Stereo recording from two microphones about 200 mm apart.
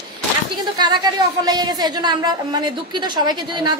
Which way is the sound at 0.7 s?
20° right (ahead or behind).